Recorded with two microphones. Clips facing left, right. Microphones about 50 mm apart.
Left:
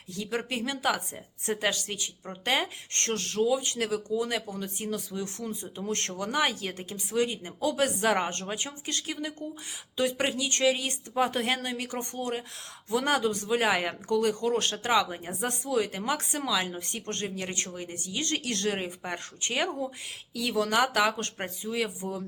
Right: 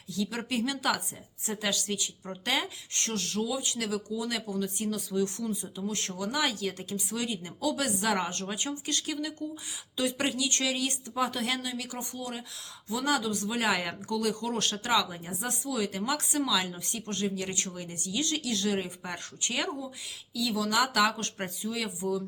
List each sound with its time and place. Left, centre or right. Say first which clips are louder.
0.1 s speech: even; left
1.5 s speech: left 2 dB; left
2.9 s speech: left 1 dB; left
5.9 s speech: left 4 dB; left
18.8 s speech: left 1 dB; left
20.3 s speech: left 2 dB; left